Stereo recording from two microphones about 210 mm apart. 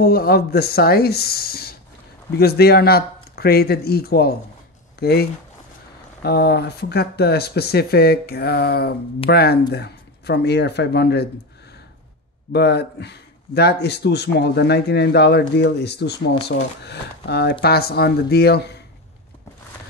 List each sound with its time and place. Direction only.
0.0 s speech: 45° left (ahead or behind)
12.5 s speech: 50° left (ahead or behind)